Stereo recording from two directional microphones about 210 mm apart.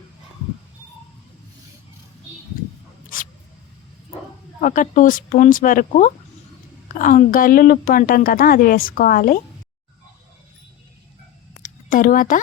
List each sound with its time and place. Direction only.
3.1 s mouse: 40° left (ahead or behind)
4.6 s a woman's voice: 40° left (ahead or behind)
11.6 s a sound: 40° left (ahead or behind)